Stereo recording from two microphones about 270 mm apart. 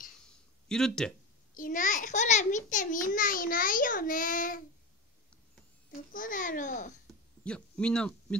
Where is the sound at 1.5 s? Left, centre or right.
Left.